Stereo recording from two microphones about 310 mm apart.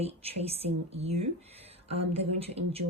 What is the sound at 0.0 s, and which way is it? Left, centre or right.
Speech, centre.